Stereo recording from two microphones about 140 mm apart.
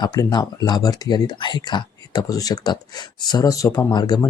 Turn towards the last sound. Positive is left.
turn(degrees=30)  # may be behind; listen again after turning